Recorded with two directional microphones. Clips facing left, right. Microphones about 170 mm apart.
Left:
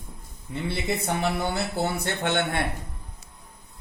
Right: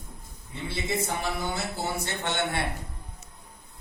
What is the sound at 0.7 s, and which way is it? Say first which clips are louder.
Speech: left 2 dB; 65° left (ahead or behind).